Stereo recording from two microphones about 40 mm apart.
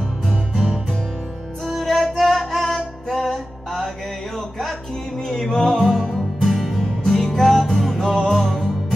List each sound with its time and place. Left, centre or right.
0.3 s music: centre
5.3 s music: centre
5.7 s music: centre